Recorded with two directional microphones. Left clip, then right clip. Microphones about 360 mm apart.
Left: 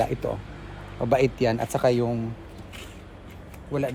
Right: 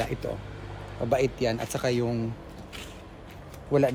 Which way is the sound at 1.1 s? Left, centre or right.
Left.